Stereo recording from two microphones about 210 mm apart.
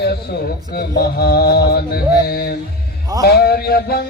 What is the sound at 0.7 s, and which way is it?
A man's voice, 50° left (ahead or behind).